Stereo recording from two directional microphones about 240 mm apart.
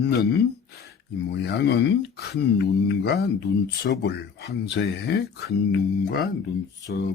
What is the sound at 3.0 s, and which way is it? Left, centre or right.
Speech, left.